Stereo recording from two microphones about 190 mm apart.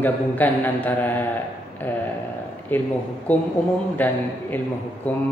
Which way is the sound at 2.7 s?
10° left (ahead or behind).